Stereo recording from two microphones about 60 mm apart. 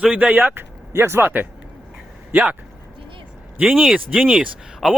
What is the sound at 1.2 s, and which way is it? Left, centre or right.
A man's voice, right.